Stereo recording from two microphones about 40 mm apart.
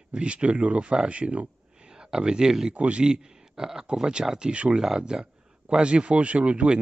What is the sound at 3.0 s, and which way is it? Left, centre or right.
Speech, centre.